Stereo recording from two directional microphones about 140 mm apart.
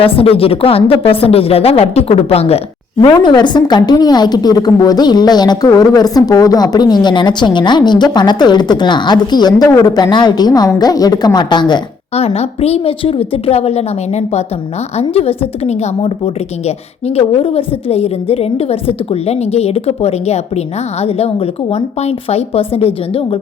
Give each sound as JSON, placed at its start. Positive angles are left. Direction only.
{"t": 0.0, "sound": "a woman's voice", "side_deg": 40}
{"t": 3.0, "sound": "a woman's voice", "side_deg": 30}
{"t": 12.1, "sound": "a woman's voice", "side_deg": 45}